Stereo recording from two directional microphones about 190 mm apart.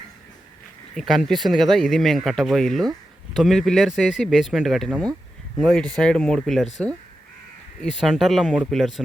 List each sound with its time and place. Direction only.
0.9 s speech: centre (ahead or behind)
7.8 s speech: centre (ahead or behind)